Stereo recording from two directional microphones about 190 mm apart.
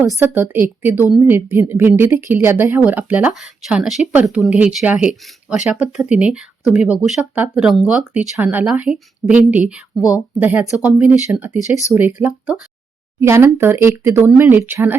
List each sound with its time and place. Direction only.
0.0 s a woman's voice: 15° right (ahead or behind)